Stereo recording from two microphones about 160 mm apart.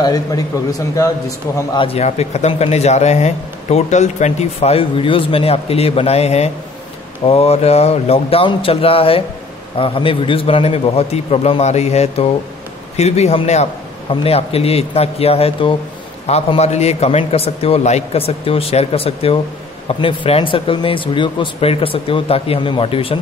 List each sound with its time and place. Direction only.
0.0 s a man's voice: 25° left (ahead or behind)
1.8 s speech: 40° left (ahead or behind)